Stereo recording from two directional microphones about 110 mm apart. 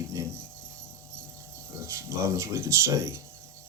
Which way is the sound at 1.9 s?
25° right (ahead or behind).